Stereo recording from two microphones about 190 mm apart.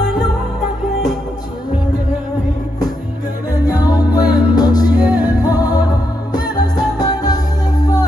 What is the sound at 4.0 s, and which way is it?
Music, 20° left (ahead or behind).